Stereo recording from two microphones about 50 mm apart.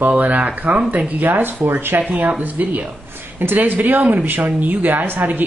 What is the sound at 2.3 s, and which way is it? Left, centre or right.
A man's voice, right.